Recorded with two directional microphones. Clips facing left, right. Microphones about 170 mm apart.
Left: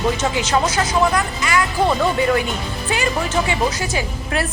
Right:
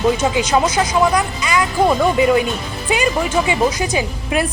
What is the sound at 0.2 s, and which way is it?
Speech, 10° right (ahead or behind).